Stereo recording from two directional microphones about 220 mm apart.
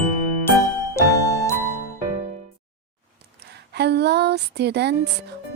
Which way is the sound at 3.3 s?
45° right (ahead or behind).